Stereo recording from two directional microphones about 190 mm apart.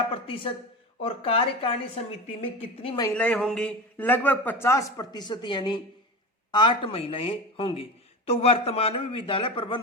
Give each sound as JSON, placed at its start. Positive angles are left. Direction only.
{"t": 0.1, "sound": "speech", "side_deg": 30}
{"t": 3.2, "sound": "a man's voice", "side_deg": 5}